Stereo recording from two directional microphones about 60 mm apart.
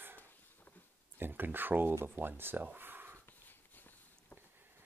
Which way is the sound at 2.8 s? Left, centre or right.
Right.